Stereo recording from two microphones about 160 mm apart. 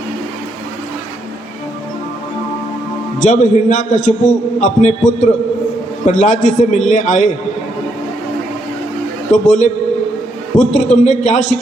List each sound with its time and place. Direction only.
3.2 s a man's voice: 50° left (ahead or behind)
9.3 s a man's voice: 50° left (ahead or behind)
10.7 s a man's voice: 50° left (ahead or behind)